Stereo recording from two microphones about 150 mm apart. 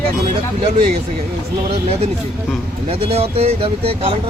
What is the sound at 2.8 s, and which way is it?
Speech, 40° right (ahead or behind).